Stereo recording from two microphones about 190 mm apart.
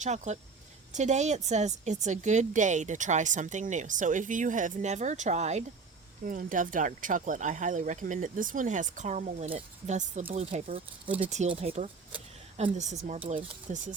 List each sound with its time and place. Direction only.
0.0 s speech: 35° right (ahead or behind)
11.5 s a sound: 30° right (ahead or behind)
12.7 s speech: 35° right (ahead or behind)